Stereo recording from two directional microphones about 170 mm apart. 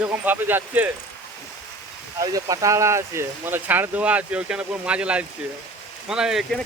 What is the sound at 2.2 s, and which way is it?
Speech, 20° right (ahead or behind).